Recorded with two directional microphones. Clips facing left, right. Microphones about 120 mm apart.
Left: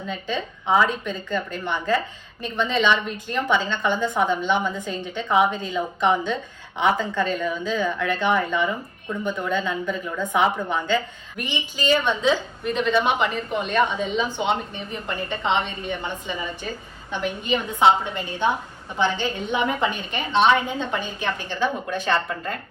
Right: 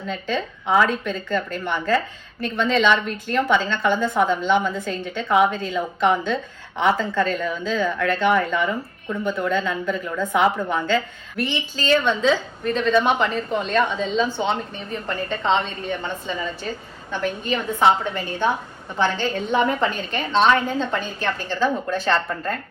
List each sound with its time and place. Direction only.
0.1 s a woman's voice: 15° left (ahead or behind)